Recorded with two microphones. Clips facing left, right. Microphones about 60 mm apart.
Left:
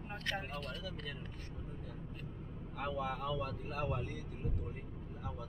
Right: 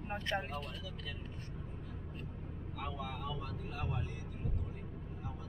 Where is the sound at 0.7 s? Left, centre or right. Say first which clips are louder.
Left 2 dB; left.